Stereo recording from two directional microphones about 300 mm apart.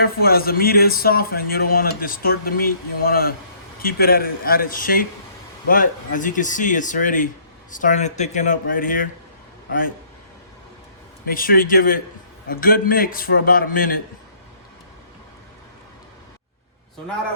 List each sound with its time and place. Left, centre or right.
0.0 s a man's voice: left
11.3 s a man's voice: left